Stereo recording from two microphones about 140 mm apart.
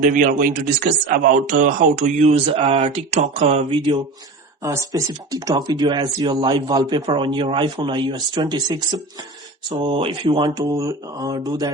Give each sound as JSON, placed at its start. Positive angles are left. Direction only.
{"t": 0.0, "sound": "speech", "side_deg": -70}
{"t": 4.6, "sound": "speech", "side_deg": -20}